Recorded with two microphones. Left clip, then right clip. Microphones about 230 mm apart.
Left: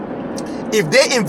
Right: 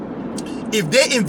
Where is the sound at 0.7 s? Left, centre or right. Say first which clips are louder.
Left 3 dB; centre.